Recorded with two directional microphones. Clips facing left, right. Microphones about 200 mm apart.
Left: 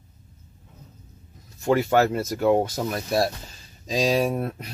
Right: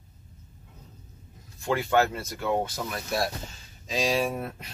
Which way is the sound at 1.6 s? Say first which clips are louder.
Left 4 dB; 40° left (ahead or behind).